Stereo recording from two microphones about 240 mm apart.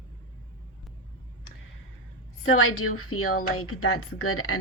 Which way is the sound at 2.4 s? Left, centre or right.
Left.